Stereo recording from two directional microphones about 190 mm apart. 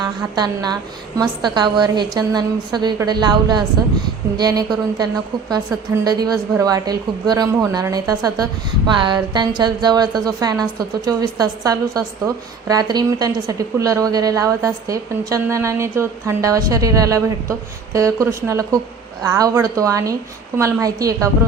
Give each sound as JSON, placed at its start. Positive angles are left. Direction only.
{"t": 0.3, "sound": "a woman's voice", "side_deg": -20}